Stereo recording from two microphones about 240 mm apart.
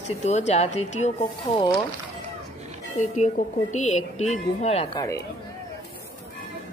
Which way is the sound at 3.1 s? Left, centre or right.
Left.